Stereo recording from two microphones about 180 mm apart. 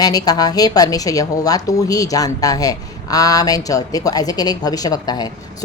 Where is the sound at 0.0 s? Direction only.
20° left (ahead or behind).